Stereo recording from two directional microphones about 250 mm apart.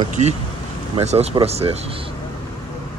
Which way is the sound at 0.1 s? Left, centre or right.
Right.